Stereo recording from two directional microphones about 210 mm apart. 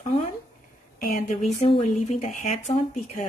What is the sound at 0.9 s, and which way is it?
Speech, 45° left (ahead or behind).